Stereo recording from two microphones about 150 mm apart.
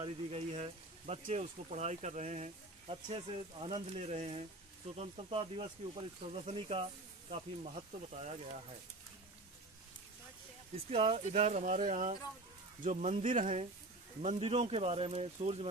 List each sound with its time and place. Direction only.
0.0 s speech: 45° right (ahead or behind)
10.9 s speech: 40° right (ahead or behind)